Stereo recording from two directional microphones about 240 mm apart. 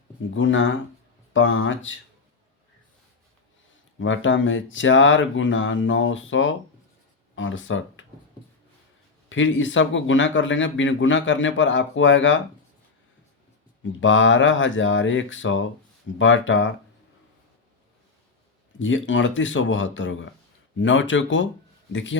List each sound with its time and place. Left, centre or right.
0.3 s speech: left
4.0 s speech: left
9.3 s speech: left
14.0 s speech: left
18.8 s speech: left